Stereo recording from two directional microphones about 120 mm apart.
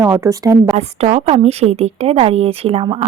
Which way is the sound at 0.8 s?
65° right (ahead or behind).